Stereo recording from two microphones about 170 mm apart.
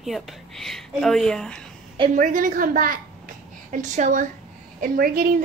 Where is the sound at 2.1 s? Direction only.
50° right (ahead or behind).